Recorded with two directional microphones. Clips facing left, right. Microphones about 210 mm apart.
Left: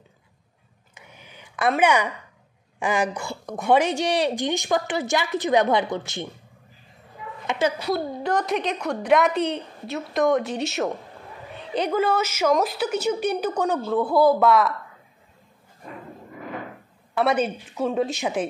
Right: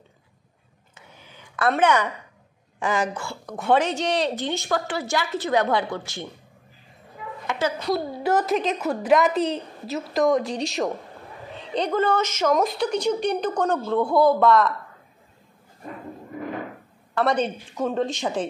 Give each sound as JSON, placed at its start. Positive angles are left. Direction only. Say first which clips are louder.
{"t": 0.9, "sound": "a sound", "louder": "left 1 dB", "side_deg": 15}
{"t": 1.7, "sound": "a woman's voice", "louder": "even", "side_deg": 10}
{"t": 7.4, "sound": "speech", "louder": "left 2 dB", "side_deg": 15}
{"t": 7.9, "sound": "a woman's voice", "louder": "right 1 dB", "side_deg": -5}
{"t": 17.1, "sound": "a woman's voice", "louder": "left 1 dB", "side_deg": 10}